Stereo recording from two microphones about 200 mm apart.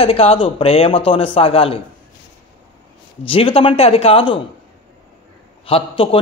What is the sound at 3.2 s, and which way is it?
Speech, 30° left (ahead or behind).